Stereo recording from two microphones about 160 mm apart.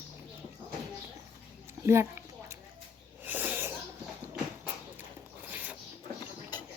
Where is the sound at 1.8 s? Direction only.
15° right (ahead or behind).